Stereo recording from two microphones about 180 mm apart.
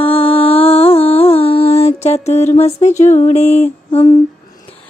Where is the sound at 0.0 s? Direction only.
30° left (ahead or behind).